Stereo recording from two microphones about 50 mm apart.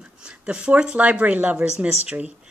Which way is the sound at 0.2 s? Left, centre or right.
Centre.